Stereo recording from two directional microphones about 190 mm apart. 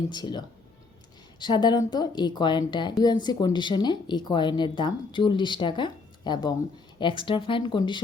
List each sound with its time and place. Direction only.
0.1 s a woman's voice: 25° left (ahead or behind)